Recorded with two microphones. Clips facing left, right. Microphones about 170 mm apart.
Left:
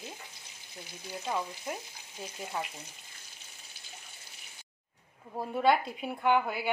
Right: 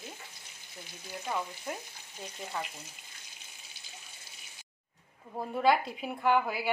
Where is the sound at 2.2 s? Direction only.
5° left (ahead or behind).